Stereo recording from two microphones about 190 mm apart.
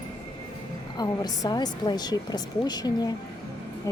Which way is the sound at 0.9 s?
20° left (ahead or behind).